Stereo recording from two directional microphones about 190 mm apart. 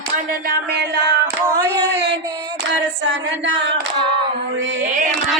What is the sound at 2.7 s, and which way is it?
Female singing, 75° right (ahead or behind).